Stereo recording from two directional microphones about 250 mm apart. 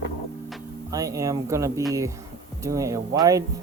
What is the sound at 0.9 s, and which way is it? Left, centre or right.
Speech, centre.